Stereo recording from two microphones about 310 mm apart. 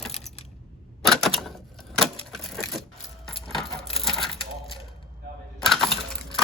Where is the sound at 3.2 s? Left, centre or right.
Centre.